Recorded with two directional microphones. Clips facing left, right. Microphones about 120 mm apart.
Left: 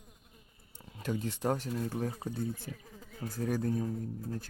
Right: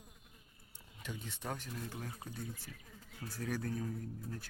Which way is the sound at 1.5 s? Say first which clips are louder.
Left 10 dB; 35° left (ahead or behind).